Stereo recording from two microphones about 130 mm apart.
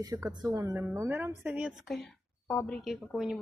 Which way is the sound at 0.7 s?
15° right (ahead or behind).